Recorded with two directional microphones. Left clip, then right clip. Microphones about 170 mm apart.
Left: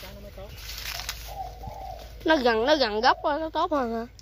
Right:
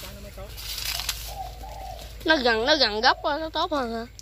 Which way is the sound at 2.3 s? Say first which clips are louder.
Right 1 dB; 30° left (ahead or behind).